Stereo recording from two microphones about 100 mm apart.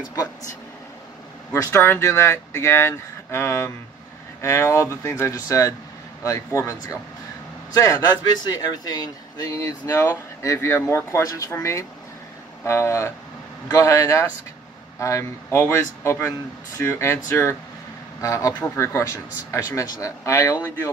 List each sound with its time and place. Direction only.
1.5 s speech: 25° left (ahead or behind)